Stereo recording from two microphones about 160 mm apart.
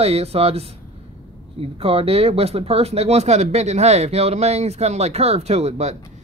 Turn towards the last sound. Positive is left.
turn(degrees=-45)  # may be behind; listen again after turning